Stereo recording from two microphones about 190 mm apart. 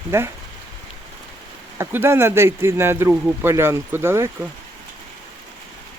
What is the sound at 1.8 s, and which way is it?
Speech, 10° right (ahead or behind).